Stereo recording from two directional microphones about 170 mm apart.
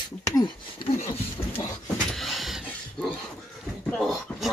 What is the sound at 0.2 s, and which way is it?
Speech, 25° left (ahead or behind).